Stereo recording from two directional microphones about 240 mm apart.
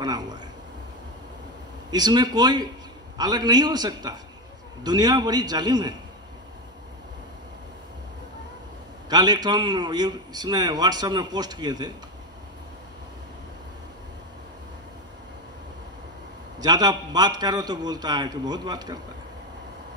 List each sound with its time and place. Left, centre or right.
0.0 s a sound: centre
1.9 s a man's voice: centre
9.1 s a man's voice: centre
16.5 s a man's voice: centre